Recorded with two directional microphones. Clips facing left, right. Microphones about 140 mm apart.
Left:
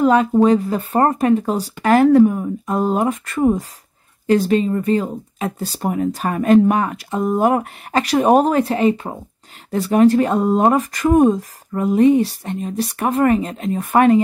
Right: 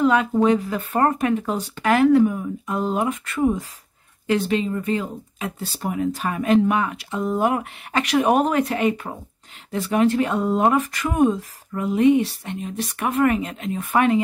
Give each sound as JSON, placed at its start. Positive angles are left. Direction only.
{"t": 0.0, "sound": "speech", "side_deg": 35}
{"t": 9.7, "sound": "speech", "side_deg": 40}